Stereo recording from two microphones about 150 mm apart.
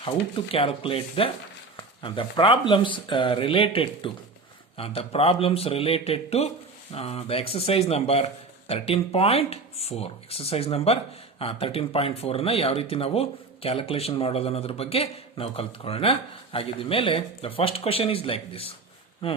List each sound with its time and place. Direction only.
0.0 s speech: 35° left (ahead or behind)